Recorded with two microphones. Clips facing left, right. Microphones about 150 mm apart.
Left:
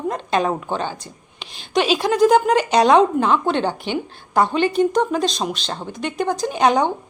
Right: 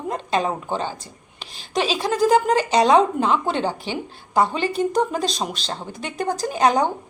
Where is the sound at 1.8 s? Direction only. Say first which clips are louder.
Left 4 dB; centre (ahead or behind).